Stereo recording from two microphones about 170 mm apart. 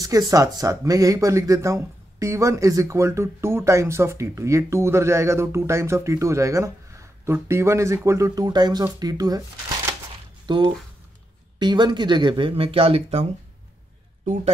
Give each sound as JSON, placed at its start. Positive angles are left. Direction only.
{"t": 0.0, "sound": "speech", "side_deg": -20}
{"t": 10.4, "sound": "a man's voice", "side_deg": -25}